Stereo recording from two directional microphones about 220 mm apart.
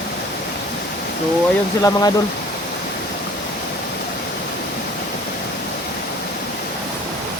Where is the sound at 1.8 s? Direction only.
15° left (ahead or behind).